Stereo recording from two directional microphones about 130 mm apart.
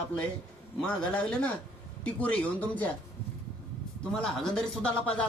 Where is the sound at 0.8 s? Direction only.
10° left (ahead or behind).